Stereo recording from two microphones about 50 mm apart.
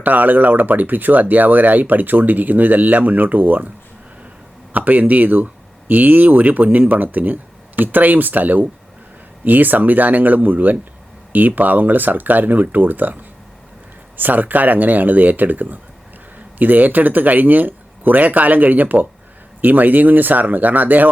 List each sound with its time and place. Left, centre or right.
0.0 s speech: right
4.7 s speech: right
14.2 s speech: right